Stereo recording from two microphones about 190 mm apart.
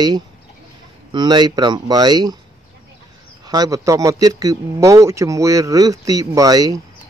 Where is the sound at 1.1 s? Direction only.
20° right (ahead or behind).